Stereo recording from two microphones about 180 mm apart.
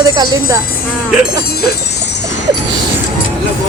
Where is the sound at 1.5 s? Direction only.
60° left (ahead or behind).